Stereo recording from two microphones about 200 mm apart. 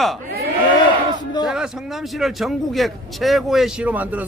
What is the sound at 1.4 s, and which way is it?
Speech, 5° right (ahead or behind).